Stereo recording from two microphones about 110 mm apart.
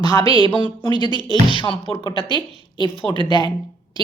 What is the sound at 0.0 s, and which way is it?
A woman's voice, 40° left (ahead or behind).